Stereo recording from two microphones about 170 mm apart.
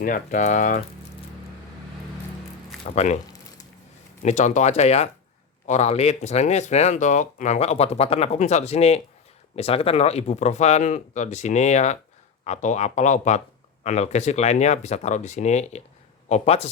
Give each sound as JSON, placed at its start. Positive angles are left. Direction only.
{"t": 0.0, "sound": "speech", "side_deg": 50}
{"t": 2.8, "sound": "speech", "side_deg": 40}
{"t": 4.2, "sound": "speech", "side_deg": 45}